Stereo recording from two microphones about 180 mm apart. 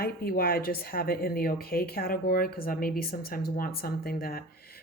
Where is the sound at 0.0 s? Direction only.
55° left (ahead or behind).